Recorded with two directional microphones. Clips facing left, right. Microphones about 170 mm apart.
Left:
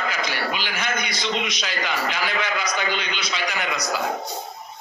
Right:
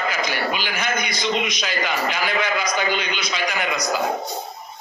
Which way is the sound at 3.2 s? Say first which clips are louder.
Right 2 dB; 50° right (ahead or behind).